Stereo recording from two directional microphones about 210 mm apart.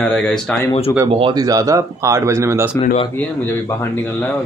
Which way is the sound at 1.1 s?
20° right (ahead or behind).